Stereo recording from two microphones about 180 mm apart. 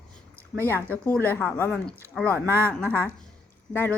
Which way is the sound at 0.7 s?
10° left (ahead or behind).